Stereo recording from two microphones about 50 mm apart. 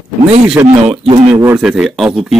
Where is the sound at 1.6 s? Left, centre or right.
Centre.